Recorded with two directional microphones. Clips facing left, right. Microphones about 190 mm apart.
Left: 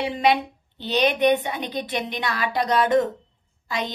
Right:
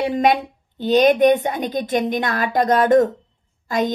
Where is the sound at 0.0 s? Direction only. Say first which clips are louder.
Right 4 dB; 45° right (ahead or behind).